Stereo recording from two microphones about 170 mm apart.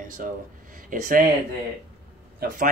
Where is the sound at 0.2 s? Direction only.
55° right (ahead or behind).